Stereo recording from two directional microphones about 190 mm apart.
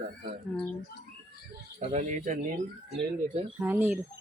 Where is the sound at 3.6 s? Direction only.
10° right (ahead or behind).